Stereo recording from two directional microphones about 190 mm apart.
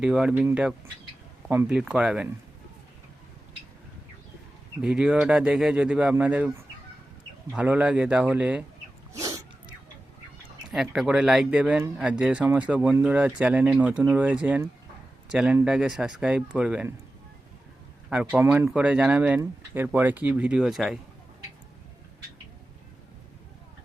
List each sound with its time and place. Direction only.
0.0 s speech: 5° right (ahead or behind)
4.8 s speech: 5° right (ahead or behind)
7.5 s speech: 5° right (ahead or behind)
9.1 s sneeze: 15° right (ahead or behind)
10.7 s speech: centre (ahead or behind)
18.1 s speech: 5° right (ahead or behind)